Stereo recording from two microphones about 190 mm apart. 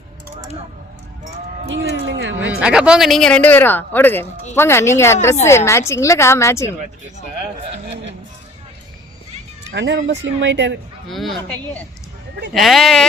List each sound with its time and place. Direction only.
1.7 s speech: 70° right (ahead or behind)
2.6 s a woman's voice: 5° right (ahead or behind); by 6.7 s 15° left (ahead or behind)
9.7 s speech: 70° right (ahead or behind)
11.1 s speech: centre (ahead or behind)